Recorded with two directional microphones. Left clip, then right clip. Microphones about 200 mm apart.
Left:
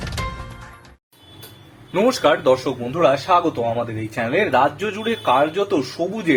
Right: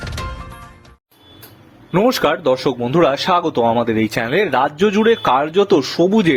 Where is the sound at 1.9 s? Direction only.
40° right (ahead or behind).